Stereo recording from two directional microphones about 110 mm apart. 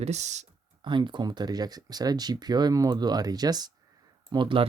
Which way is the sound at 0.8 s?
45° right (ahead or behind).